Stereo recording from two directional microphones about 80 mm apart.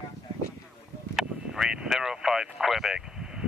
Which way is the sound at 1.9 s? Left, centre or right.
Centre.